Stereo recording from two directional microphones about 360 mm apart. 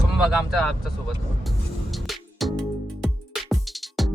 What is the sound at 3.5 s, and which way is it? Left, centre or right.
Music, centre.